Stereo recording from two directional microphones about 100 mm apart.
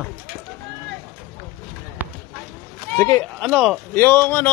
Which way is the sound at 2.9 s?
20° left (ahead or behind).